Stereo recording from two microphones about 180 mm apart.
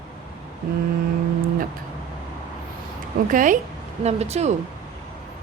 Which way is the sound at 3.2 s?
45° right (ahead or behind).